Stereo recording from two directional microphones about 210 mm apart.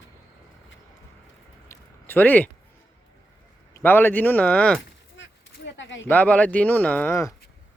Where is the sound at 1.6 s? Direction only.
10° left (ahead or behind).